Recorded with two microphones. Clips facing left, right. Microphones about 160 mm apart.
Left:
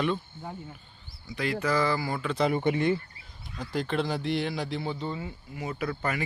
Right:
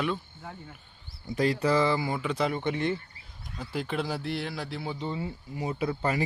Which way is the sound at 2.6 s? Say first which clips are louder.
Left 4 dB; 10° left (ahead or behind).